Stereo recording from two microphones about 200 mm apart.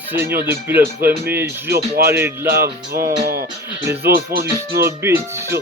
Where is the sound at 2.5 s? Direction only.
50° right (ahead or behind).